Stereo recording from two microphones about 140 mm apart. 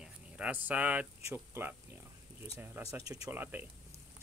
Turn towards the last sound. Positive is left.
turn(degrees=-10)  # may be behind; listen again after turning